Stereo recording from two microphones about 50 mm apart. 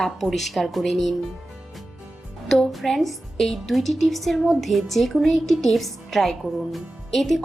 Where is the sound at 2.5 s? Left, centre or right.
Centre.